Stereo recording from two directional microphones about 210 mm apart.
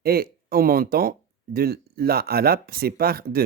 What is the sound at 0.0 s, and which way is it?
Speech, 45° right (ahead or behind).